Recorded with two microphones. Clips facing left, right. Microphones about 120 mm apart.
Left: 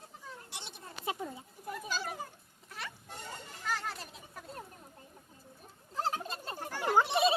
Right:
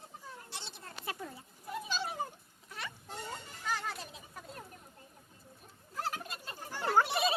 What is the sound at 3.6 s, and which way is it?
Children playing, centre (ahead or behind).